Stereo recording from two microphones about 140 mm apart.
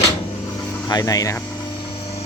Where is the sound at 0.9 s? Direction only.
25° left (ahead or behind).